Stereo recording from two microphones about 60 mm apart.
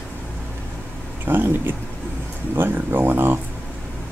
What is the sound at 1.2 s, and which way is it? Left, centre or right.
Speech, right.